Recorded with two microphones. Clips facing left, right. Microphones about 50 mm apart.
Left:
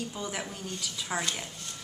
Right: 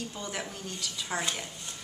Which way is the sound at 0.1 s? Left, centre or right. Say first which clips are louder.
Left 1 dB; centre.